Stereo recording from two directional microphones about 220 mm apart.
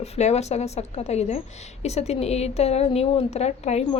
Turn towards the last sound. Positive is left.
turn(degrees=30)  # may be behind; listen again after turning